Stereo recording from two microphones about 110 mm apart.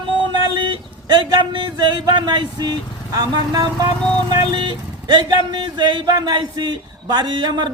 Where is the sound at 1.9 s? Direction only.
40° right (ahead or behind).